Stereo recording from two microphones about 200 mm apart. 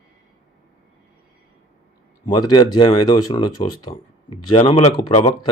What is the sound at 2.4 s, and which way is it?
Speech, 20° left (ahead or behind).